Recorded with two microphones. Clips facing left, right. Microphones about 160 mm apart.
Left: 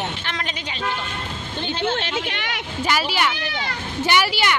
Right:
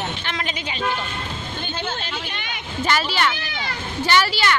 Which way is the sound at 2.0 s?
80° left.